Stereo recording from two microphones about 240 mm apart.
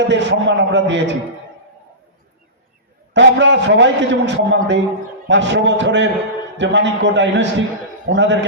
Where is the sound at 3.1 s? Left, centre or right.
Right.